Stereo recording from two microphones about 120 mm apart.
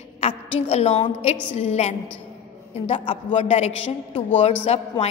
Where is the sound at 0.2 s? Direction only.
65° left (ahead or behind).